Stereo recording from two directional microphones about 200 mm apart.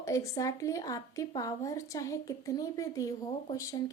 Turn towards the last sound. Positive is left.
turn(degrees=15)  # may be behind; listen again after turning